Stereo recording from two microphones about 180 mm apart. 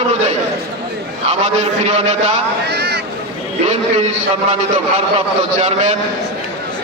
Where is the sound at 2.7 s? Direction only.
65° right (ahead or behind).